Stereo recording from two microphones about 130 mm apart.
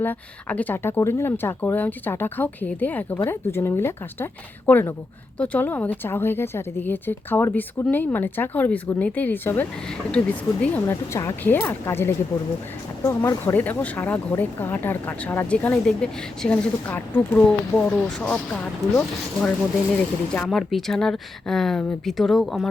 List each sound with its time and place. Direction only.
0.0 s a woman's voice: 15° left (ahead or behind)
10.8 s a woman's voice: 20° left (ahead or behind)
13.4 s speech: 15° left (ahead or behind)